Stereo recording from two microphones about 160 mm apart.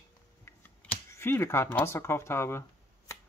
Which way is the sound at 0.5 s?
15° left (ahead or behind).